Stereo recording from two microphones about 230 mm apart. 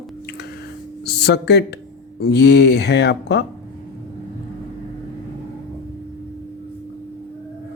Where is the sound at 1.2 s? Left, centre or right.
Left.